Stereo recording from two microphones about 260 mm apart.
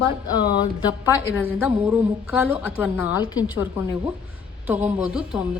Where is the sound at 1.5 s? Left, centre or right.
Centre.